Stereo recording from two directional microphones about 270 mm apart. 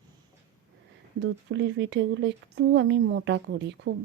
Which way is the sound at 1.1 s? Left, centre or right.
Right.